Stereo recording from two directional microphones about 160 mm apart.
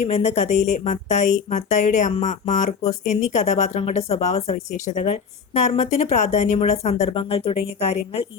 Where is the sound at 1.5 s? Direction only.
50° left (ahead or behind).